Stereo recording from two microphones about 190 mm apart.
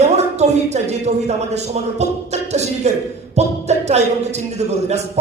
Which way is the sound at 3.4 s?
35° right (ahead or behind).